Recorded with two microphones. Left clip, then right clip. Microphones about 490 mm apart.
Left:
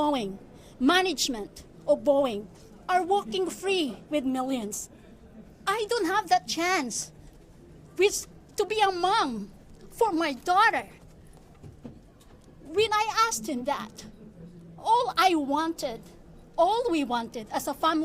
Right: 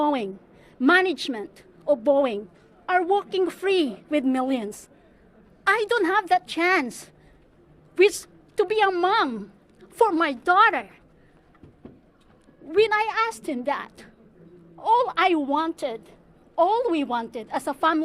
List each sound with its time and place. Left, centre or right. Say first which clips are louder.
0.0 s a sound: right 3 dB; right
0.8 s a woman's voice: right 4 dB; right
8.0 s a woman's voice: right 5 dB; right
12.7 s a woman's voice: right 4 dB; right